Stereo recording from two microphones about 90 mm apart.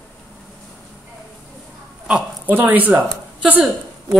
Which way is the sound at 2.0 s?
15° right (ahead or behind).